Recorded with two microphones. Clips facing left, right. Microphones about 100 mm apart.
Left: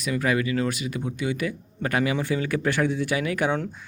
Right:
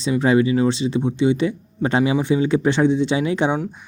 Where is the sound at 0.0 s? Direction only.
25° right (ahead or behind).